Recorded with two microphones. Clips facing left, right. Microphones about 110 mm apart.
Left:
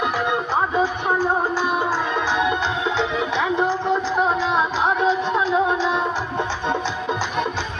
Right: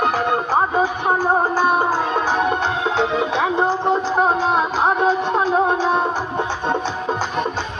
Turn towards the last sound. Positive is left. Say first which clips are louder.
# right 2 dB
turn(degrees=-50)  # may be behind; listen again after turning